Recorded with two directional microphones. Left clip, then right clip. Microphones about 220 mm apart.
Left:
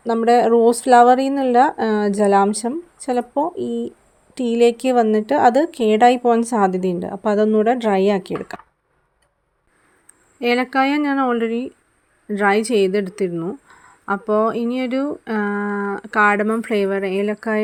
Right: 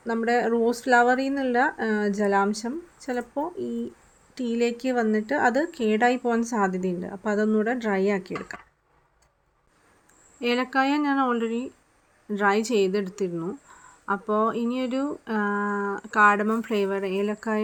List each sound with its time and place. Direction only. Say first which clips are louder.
0.0 s a woman's voice: left 9 dB; 30° left (ahead or behind)
10.4 s speech: left 6 dB; 25° left (ahead or behind)